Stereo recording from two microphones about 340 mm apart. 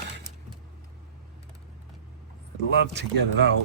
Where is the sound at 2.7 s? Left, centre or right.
Right.